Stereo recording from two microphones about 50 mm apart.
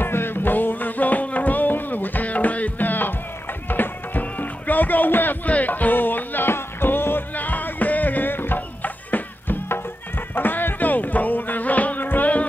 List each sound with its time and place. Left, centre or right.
0.0 s music: left